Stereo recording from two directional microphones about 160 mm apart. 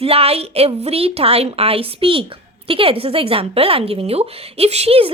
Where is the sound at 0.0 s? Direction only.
40° right (ahead or behind).